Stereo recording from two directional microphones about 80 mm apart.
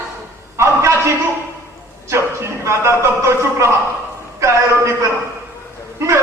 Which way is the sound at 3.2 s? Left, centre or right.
Right.